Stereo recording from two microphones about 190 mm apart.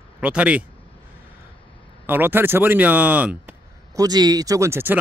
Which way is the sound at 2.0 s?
10° right (ahead or behind).